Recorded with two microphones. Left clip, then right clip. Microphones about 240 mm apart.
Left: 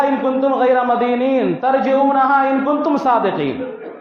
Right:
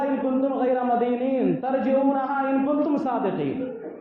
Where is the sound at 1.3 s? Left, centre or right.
Left.